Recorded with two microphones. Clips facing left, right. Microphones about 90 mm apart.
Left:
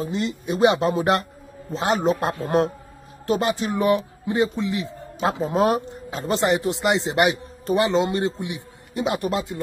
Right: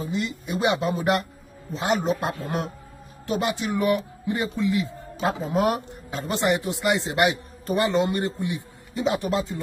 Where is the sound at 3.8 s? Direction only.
25° left (ahead or behind).